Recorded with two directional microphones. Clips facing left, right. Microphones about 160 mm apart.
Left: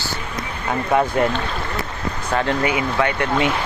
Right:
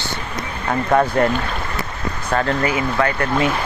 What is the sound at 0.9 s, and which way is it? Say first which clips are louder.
Speech: right 2 dB; 10° left (ahead or behind).